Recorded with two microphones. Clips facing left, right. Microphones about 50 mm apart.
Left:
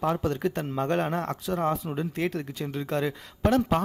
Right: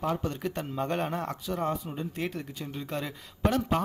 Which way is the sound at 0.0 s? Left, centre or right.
Left.